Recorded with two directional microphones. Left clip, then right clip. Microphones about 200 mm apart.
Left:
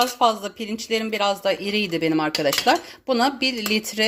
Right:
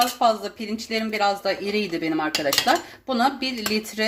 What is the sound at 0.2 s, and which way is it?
Speech, 35° left (ahead or behind).